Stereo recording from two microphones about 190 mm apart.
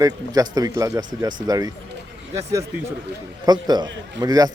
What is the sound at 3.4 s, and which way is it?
Speech, 20° right (ahead or behind).